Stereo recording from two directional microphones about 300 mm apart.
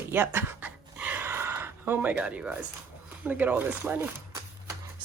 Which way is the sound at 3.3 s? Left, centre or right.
Centre.